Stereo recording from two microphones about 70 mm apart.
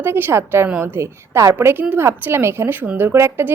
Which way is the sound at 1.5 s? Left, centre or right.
Right.